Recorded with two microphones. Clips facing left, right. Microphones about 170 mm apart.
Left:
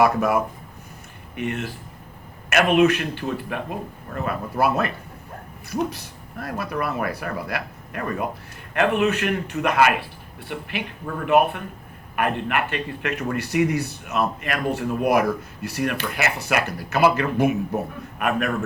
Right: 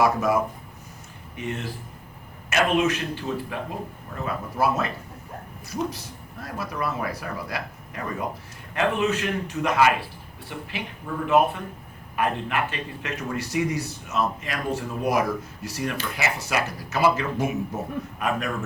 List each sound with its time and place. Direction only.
0.0 s a man's voice: 60° left (ahead or behind)
1.4 s a man's voice: 60° left (ahead or behind)